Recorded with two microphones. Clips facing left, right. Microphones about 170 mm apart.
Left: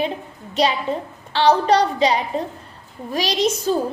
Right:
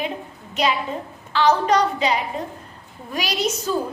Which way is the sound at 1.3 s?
35° left (ahead or behind).